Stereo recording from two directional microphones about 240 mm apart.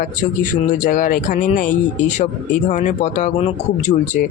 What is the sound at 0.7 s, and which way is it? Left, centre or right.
Speech, left.